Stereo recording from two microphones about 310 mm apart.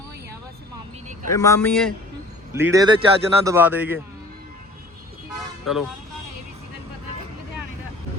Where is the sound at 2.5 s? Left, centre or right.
Centre.